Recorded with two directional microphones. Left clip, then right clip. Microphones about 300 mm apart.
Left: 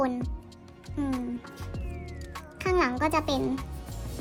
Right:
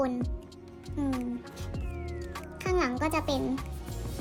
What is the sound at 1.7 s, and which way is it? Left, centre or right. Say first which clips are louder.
Music: right 2 dB; centre.